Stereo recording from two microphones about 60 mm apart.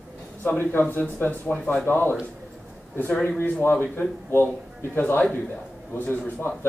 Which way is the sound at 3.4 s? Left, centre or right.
Left.